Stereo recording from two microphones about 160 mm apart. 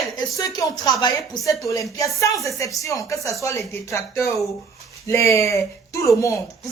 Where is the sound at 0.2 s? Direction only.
20° left (ahead or behind).